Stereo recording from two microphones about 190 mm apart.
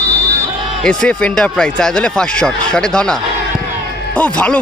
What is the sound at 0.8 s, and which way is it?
Speech, 5° left (ahead or behind).